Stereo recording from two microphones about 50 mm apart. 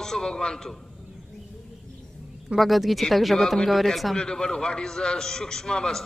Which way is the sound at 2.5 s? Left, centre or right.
Centre.